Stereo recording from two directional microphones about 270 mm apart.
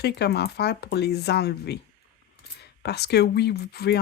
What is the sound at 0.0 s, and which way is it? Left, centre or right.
Speech, left.